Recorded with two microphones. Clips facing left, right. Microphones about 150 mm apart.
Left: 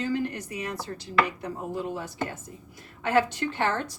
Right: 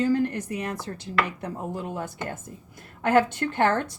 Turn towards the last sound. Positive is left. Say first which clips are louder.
# right 4 dB
turn(degrees=-55)  # may be behind; listen again after turning